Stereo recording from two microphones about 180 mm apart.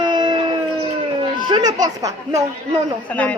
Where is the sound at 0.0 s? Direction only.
25° right (ahead or behind).